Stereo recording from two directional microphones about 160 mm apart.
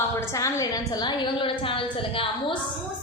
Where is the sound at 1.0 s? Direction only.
30° left (ahead or behind).